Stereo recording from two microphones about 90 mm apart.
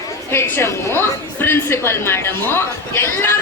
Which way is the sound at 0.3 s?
25° left (ahead or behind).